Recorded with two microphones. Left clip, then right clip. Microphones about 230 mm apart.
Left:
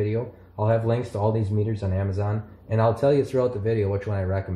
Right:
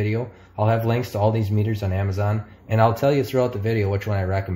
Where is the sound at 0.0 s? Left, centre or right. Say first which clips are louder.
Even; right.